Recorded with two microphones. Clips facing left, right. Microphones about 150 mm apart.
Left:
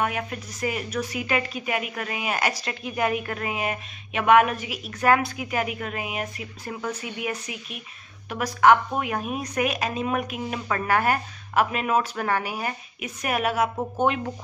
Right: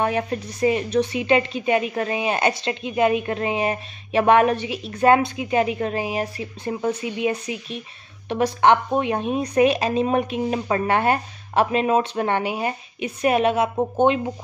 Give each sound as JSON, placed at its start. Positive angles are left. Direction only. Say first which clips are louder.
{"t": 0.0, "sound": "a woman's voice", "louder": "right 5 dB", "side_deg": -30}